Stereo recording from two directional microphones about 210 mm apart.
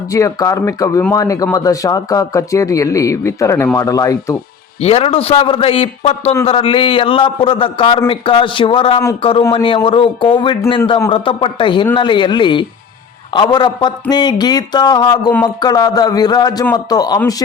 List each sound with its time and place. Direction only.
0.1 s speech: 15° left (ahead or behind)
4.8 s a man's voice: 30° left (ahead or behind)